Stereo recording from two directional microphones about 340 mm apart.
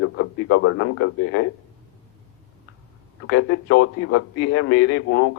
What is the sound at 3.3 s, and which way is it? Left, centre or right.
A man's voice, left.